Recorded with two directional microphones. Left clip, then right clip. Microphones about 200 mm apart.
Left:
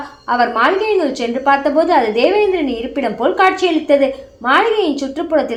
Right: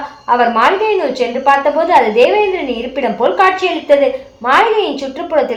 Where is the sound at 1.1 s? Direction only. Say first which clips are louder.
Right 3 dB; 35° left (ahead or behind).